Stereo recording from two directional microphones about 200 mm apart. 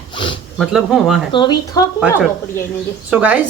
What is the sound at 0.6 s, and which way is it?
Speech, centre (ahead or behind).